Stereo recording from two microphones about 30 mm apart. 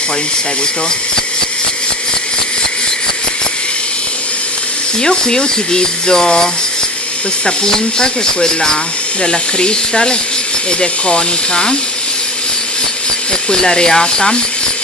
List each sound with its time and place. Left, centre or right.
5.0 s speech: left
13.5 s speech: left